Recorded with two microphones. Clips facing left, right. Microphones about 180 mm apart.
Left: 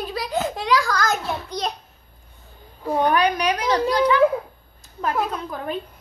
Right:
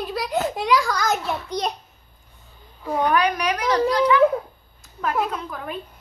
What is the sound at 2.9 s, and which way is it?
A woman's voice, 30° left (ahead or behind).